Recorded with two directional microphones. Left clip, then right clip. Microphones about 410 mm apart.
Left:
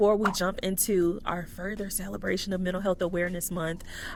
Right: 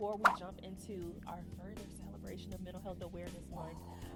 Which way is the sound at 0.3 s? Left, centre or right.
Left.